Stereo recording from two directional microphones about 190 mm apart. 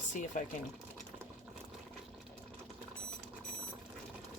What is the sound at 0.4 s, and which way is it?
Speech, 40° left (ahead or behind).